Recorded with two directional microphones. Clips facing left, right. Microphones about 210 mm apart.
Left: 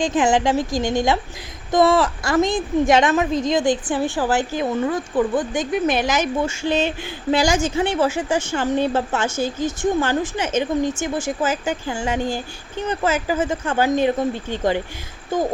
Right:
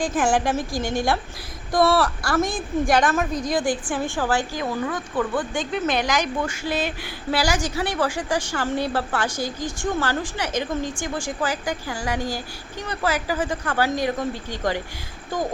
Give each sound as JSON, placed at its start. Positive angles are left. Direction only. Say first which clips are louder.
{"t": 0.0, "sound": "a woman's voice", "louder": "left 3 dB", "side_deg": 20}